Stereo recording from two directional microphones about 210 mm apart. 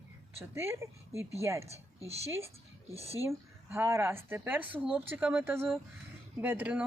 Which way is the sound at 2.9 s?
30° right (ahead or behind).